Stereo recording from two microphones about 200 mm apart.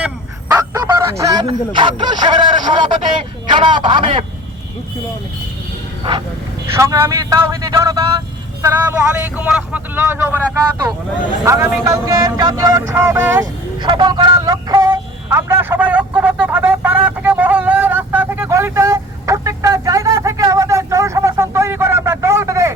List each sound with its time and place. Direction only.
0.0 s speech: 10° right (ahead or behind)
6.7 s a man's voice: 15° right (ahead or behind)
11.4 s vehicle: 15° right (ahead or behind)